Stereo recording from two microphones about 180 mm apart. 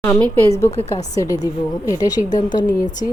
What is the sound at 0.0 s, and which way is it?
A woman's voice, 10° left (ahead or behind).